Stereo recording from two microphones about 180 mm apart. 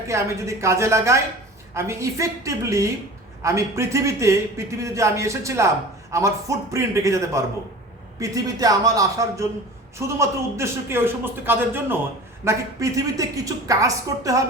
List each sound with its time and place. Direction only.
0.1 s a woman's voice: 15° right (ahead or behind)